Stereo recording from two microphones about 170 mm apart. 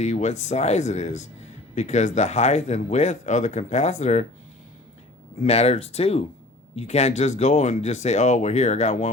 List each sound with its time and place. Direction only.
0.0 s speech: 45° left (ahead or behind)
5.4 s speech: 40° left (ahead or behind)